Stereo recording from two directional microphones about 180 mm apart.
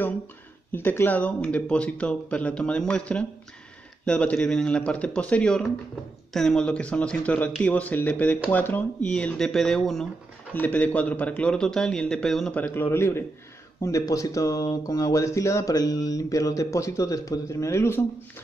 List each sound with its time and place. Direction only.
0.7 s a man's voice: 10° left (ahead or behind)